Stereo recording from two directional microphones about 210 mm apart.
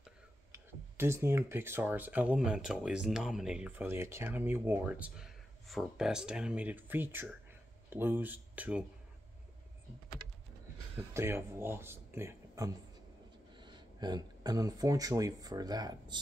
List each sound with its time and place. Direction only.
0.7 s speech: 10° right (ahead or behind)
11.1 s speech: 10° right (ahead or behind)